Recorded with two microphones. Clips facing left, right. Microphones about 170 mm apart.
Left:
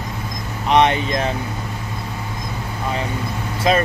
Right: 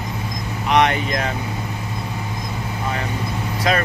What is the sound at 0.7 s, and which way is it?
Speech, 25° left (ahead or behind).